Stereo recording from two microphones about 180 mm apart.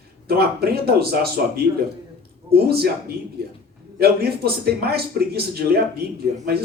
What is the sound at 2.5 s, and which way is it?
Speech, 60° right (ahead or behind).